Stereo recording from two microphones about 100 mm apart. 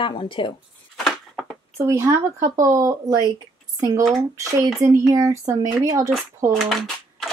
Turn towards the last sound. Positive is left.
turn(degrees=0)  # may be behind; listen again after turning